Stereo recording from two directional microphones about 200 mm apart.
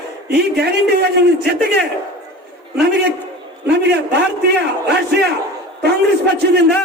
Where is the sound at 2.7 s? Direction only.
55° right (ahead or behind).